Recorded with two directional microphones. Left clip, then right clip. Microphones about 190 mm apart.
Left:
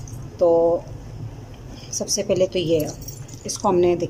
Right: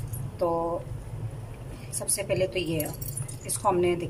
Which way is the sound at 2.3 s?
40° left (ahead or behind).